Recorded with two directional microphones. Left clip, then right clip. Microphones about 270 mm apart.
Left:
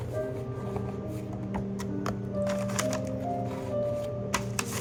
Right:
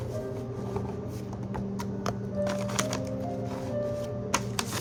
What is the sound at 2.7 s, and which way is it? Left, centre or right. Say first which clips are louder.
Music: even; right.